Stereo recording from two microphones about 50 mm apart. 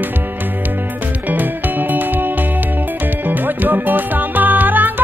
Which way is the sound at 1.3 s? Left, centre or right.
Right.